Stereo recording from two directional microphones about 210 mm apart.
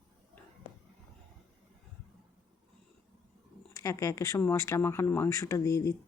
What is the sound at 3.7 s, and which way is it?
Speech, 15° left (ahead or behind).